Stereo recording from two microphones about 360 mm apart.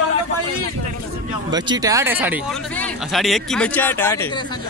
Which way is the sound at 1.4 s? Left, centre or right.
Centre.